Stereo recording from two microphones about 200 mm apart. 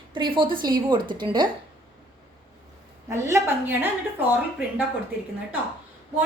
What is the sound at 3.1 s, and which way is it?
Speech, 15° right (ahead or behind).